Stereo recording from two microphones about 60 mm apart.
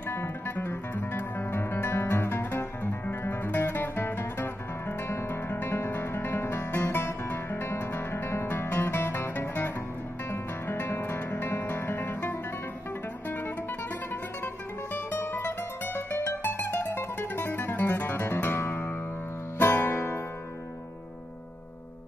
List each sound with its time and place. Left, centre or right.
0.1 s music: left
15.0 s music: left
18.7 s music: left